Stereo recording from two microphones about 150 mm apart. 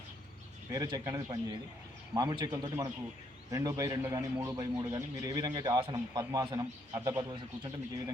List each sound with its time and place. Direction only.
0.7 s a man's voice: 25° right (ahead or behind)
7.3 s a man's voice: 30° right (ahead or behind)